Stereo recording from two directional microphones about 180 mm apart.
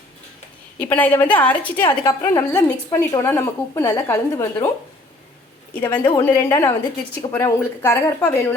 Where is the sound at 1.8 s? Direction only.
20° left (ahead or behind).